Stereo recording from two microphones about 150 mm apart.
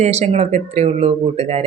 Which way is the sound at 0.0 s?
45° right (ahead or behind).